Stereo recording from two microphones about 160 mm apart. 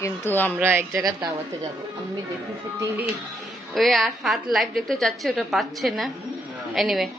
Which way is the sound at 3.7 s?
Centre (ahead or behind).